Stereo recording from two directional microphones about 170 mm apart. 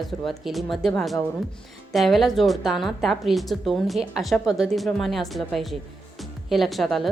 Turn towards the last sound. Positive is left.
turn(degrees=0)  # may be behind; listen again after turning